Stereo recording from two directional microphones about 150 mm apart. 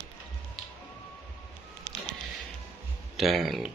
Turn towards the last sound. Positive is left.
turn(degrees=0)  # may be behind; listen again after turning